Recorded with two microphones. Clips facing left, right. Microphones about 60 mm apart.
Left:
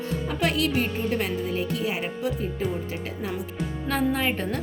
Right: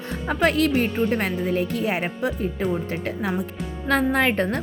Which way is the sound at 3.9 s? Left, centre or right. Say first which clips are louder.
Right 5 dB; right.